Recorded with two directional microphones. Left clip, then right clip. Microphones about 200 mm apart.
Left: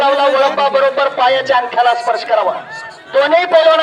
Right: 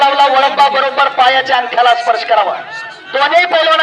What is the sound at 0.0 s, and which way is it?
A man's voice, 40° left (ahead or behind).